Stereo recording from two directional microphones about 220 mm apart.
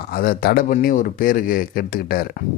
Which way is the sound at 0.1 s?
40° left (ahead or behind).